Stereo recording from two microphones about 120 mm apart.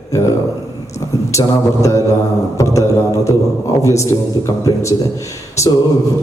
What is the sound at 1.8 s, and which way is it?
A man's voice, 25° left (ahead or behind).